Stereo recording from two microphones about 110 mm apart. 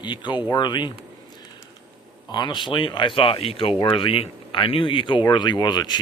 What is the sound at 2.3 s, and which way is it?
Speech, 45° left (ahead or behind).